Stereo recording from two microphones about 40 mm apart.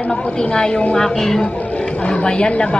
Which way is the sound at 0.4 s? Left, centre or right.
Left.